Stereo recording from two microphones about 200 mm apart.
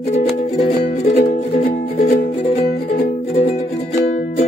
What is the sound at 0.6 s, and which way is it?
Music, 30° left (ahead or behind).